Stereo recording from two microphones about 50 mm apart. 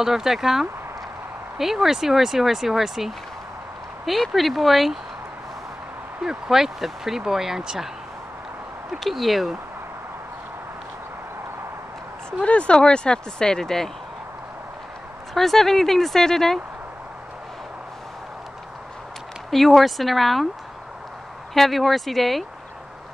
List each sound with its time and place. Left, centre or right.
0.0 s speech: centre
4.3 s speech: centre
6.2 s speech: centre
9.0 s speech: centre
12.4 s speech: left
15.3 s speech: centre
19.5 s speech: centre
21.5 s speech: centre